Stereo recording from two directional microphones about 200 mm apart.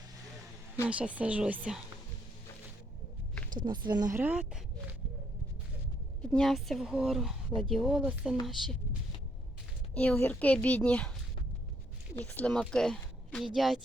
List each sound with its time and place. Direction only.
0.9 s speech: 5° right (ahead or behind)
3.7 s speech: 20° right (ahead or behind)
6.3 s a woman's voice: centre (ahead or behind)
12.2 s speech: 10° left (ahead or behind)